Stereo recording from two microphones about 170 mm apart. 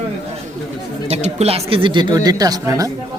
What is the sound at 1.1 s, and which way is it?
Speech, 40° right (ahead or behind).